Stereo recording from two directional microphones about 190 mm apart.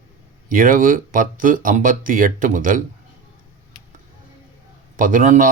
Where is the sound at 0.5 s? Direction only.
45° right (ahead or behind).